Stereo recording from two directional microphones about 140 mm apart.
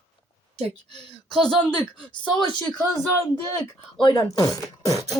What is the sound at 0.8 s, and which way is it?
Speech, 35° left (ahead or behind).